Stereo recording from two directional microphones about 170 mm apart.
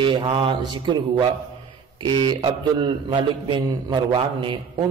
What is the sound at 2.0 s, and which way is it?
Speech, 25° right (ahead or behind).